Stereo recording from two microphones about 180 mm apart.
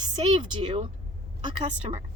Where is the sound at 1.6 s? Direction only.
40° right (ahead or behind).